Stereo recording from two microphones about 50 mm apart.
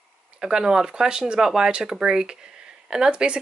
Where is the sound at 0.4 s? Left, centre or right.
Centre.